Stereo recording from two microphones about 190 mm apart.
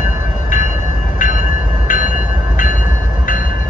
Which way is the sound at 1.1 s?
40° left (ahead or behind).